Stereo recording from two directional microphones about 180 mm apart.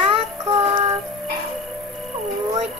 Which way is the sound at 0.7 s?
35° right (ahead or behind).